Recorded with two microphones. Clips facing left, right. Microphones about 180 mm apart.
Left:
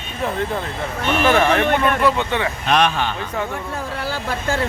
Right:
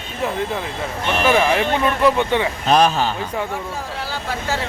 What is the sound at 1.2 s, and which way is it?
Speech, 10° right (ahead or behind).